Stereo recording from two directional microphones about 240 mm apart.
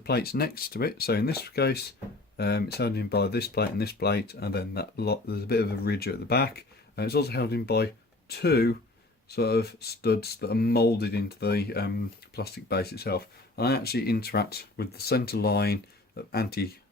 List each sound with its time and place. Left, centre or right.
0.0 s speech: left